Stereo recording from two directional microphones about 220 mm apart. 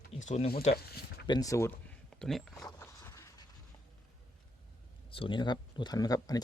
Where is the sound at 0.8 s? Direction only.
45° left (ahead or behind).